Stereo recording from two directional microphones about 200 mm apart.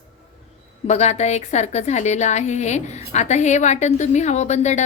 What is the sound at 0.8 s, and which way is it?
A woman's voice, 35° left (ahead or behind).